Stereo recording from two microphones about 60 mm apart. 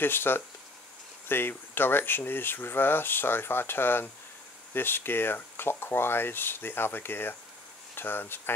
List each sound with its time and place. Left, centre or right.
0.0 s speech: left